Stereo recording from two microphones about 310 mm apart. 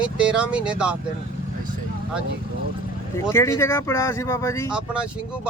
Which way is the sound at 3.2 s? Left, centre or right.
Centre.